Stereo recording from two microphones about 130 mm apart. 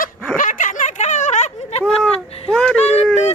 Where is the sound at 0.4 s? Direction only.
80° left; by 1.5 s 65° left (ahead or behind).